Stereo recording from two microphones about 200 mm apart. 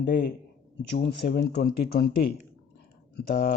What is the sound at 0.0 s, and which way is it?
A man's voice, 55° left (ahead or behind).